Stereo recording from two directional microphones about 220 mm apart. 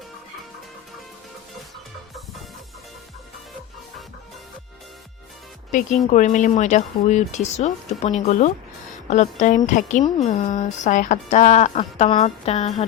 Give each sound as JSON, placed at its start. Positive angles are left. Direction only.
{"t": 6.1, "sound": "speech", "side_deg": 35}